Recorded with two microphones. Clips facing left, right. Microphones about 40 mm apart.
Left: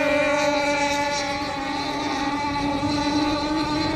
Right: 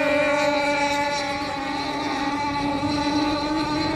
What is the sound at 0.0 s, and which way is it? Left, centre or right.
Vehicle, centre.